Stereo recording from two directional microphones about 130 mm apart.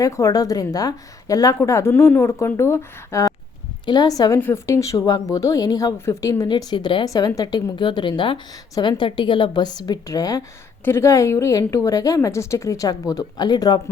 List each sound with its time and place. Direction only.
0.0 s a woman's voice: 25° left (ahead or behind)
4.4 s a woman's voice: 20° left (ahead or behind)